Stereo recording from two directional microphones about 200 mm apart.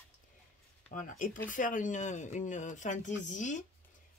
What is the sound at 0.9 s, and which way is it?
Speech, 40° left (ahead or behind).